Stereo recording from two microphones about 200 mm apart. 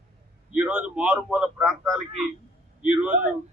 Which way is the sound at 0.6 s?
5° right (ahead or behind).